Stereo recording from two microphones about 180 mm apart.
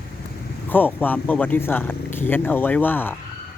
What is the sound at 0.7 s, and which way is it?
Speech, 10° left (ahead or behind).